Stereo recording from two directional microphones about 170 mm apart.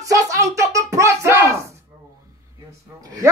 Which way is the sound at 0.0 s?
20° right (ahead or behind).